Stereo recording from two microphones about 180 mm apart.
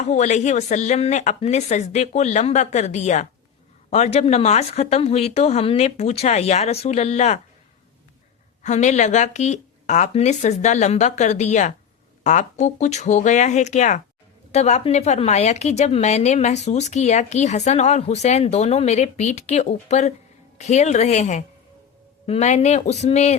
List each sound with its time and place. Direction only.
0.0 s a woman's voice: 40° left (ahead or behind)
8.6 s a woman's voice: 40° left (ahead or behind)